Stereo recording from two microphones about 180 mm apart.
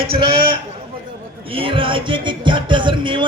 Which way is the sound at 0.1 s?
30° right (ahead or behind).